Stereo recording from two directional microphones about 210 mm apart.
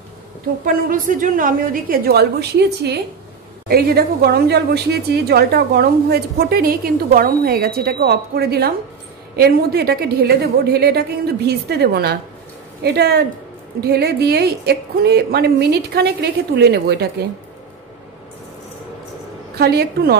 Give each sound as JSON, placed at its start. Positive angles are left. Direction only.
{"t": 0.8, "sound": "a woman's voice", "side_deg": -40}
{"t": 3.6, "sound": "a woman's voice", "side_deg": -45}
{"t": 19.6, "sound": "a woman's voice", "side_deg": -50}